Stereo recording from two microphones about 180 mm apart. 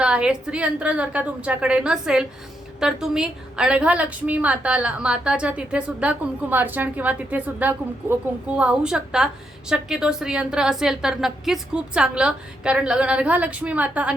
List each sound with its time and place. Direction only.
0.0 s a woman's voice: 5° right (ahead or behind)